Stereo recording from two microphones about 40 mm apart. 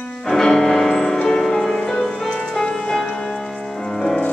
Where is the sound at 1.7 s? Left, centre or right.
Left.